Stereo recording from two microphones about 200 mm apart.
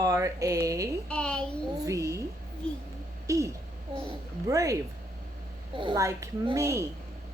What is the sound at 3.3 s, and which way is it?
A child's voice, 15° right (ahead or behind).